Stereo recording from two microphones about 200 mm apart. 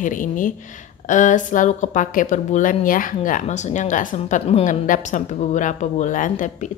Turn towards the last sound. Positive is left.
turn(degrees=40)  # may be behind; listen again after turning